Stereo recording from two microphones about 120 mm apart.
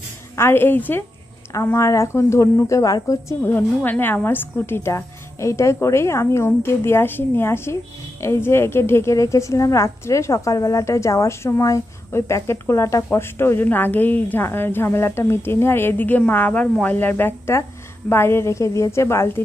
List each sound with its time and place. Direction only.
0.4 s a woman's voice: 20° left (ahead or behind)